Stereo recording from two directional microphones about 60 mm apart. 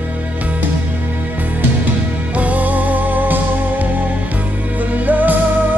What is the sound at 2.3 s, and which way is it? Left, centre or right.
Music, right.